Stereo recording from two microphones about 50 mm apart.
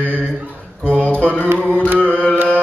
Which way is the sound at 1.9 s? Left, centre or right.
Left.